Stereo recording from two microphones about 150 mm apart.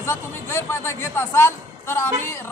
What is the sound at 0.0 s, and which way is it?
A man's voice, 15° left (ahead or behind).